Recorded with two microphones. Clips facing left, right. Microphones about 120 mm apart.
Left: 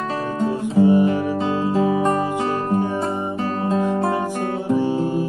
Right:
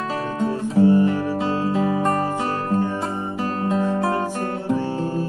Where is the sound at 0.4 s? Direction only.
15° left (ahead or behind).